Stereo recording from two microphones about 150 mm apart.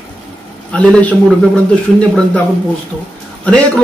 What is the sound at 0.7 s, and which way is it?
A man's voice, 10° left (ahead or behind).